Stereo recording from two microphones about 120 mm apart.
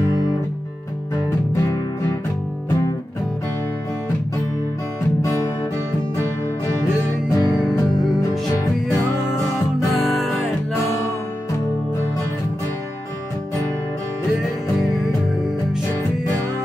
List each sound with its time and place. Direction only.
7.2 s music: 20° left (ahead or behind)
9.9 s music: centre (ahead or behind)